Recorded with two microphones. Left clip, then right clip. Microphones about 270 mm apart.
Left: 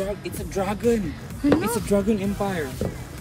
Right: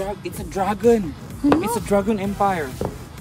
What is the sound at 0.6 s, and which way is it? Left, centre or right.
Speech, right.